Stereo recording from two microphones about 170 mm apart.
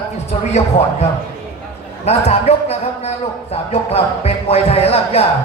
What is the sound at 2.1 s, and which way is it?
Speech, 40° left (ahead or behind).